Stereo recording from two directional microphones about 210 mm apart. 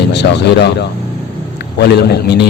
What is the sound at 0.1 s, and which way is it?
Speech, 55° left (ahead or behind).